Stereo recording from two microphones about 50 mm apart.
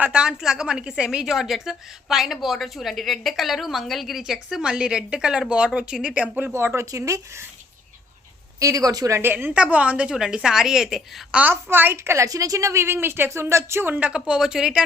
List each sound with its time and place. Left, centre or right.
0.1 s a woman's voice: centre
1.2 s a woman's voice: centre
6.2 s a woman's voice: right
6.5 s a woman's voice: right
8.5 s speech: right
9.2 s a woman's voice: right
9.6 s a woman's voice: right
10.2 s a woman's voice: centre
11.4 s a woman's voice: right
12.0 s a woman's voice: right
13.3 s speech: right
14.0 s a woman's voice: centre